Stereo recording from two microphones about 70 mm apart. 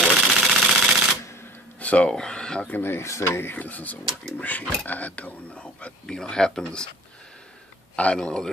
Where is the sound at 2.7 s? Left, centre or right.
Left.